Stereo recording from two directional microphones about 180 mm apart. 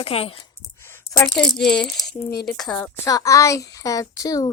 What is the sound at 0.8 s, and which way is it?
Speech, 15° left (ahead or behind).